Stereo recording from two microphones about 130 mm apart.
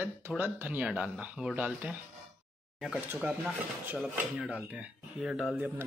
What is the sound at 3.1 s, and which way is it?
Speech, 10° right (ahead or behind).